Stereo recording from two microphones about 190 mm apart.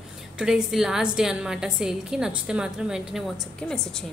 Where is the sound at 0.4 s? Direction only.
5° right (ahead or behind).